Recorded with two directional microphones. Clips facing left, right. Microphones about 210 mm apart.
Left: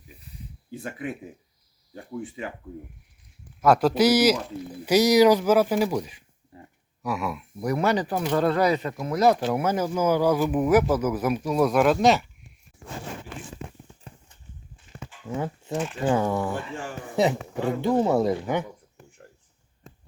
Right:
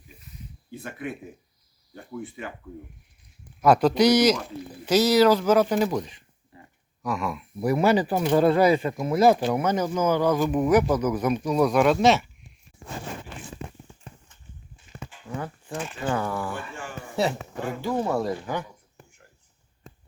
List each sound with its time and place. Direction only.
3.6 s speech: centre (ahead or behind)
7.6 s speech: 5° right (ahead or behind)
9.6 s speech: 5° left (ahead or behind)
15.4 s speech: 20° left (ahead or behind)